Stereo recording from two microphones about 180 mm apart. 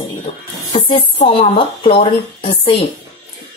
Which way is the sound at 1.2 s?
35° left (ahead or behind).